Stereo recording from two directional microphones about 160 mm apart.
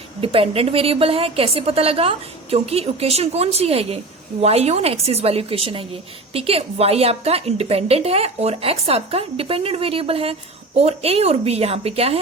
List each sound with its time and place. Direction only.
0.2 s a woman's voice: 35° right (ahead or behind)